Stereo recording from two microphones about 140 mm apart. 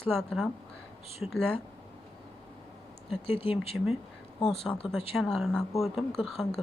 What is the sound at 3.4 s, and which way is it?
Speech, 45° left (ahead or behind).